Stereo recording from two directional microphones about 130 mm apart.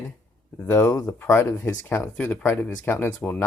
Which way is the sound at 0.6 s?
15° left (ahead or behind).